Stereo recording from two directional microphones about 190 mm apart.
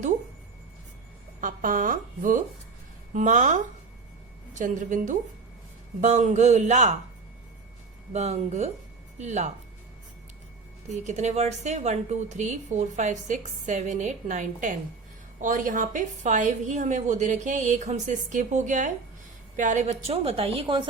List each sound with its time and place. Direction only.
1.4 s a woman's voice: 45° right (ahead or behind)
8.1 s speech: 35° right (ahead or behind)
10.8 s speech: 40° right (ahead or behind)